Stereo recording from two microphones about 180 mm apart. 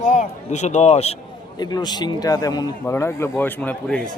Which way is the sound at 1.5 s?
20° left (ahead or behind).